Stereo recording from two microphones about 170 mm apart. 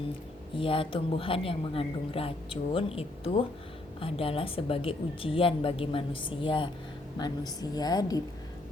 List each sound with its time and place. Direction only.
0.5 s a woman's voice: 30° left (ahead or behind)